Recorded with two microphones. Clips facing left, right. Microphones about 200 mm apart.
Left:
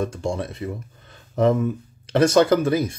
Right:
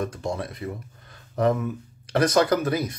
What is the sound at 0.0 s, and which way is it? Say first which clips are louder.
Speech: left 3 dB; 25° left (ahead or behind).